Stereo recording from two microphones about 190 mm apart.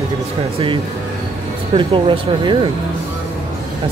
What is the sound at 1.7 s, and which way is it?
Speech, 30° right (ahead or behind).